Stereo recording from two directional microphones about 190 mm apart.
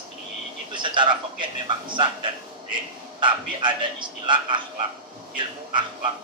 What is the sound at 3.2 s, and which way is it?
A man's voice, 25° right (ahead or behind).